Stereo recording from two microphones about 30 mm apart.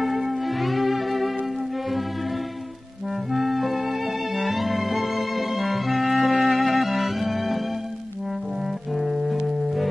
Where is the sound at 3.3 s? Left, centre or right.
Centre.